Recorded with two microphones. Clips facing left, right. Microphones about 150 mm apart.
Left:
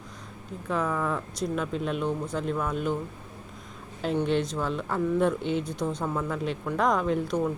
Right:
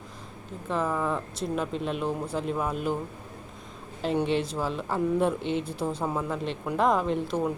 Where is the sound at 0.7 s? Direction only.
5° right (ahead or behind).